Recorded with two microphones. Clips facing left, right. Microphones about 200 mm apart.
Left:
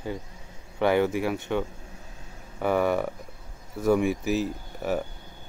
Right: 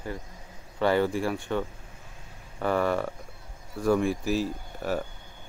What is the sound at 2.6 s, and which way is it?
Speech, 10° left (ahead or behind).